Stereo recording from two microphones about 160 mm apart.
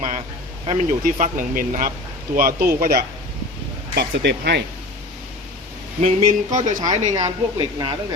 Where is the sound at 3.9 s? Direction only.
90° right.